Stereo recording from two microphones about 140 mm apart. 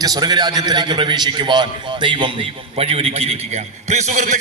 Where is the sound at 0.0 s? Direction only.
30° right (ahead or behind).